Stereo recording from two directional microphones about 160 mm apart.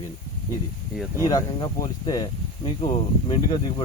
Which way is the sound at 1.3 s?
25° left (ahead or behind).